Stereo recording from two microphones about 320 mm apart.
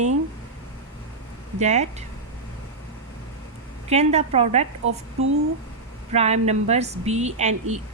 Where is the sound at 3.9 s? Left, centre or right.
Centre.